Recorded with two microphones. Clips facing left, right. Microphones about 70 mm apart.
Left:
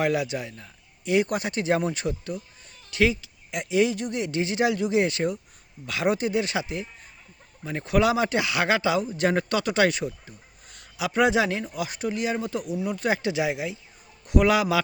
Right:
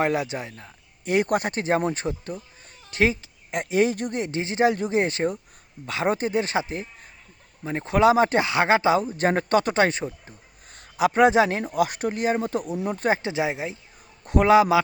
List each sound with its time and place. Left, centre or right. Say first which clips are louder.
0.0 s speech: right 1 dB; right